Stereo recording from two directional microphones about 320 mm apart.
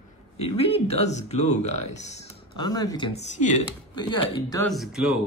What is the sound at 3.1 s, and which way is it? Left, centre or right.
Speech, left.